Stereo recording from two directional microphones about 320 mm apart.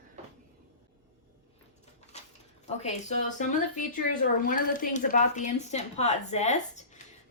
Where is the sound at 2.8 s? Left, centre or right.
Left.